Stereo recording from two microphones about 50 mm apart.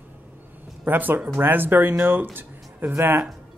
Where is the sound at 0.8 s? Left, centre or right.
Right.